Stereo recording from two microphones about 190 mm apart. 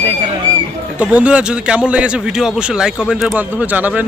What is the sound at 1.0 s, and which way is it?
A man's voice, 5° right (ahead or behind).